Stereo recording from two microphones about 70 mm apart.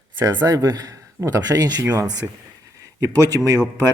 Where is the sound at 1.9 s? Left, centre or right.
Right.